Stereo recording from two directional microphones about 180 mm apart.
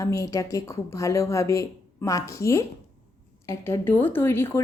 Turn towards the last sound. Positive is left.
turn(degrees=15)  # may be behind; listen again after turning